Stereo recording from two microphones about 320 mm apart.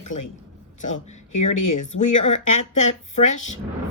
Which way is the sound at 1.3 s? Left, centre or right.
Left.